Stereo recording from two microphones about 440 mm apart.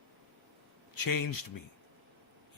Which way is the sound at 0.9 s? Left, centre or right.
Left.